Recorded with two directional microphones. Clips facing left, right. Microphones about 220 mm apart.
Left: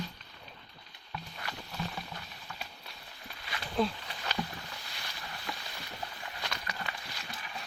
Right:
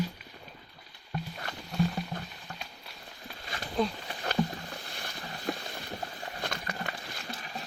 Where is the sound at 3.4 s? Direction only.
45° right (ahead or behind).